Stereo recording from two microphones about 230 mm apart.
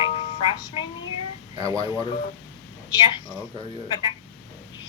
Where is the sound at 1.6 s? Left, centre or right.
Centre.